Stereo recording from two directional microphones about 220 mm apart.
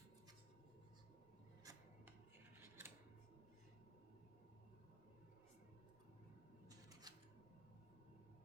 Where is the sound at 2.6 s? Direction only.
10° right (ahead or behind).